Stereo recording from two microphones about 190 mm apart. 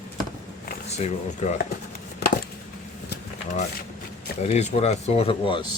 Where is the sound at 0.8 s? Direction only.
35° left (ahead or behind).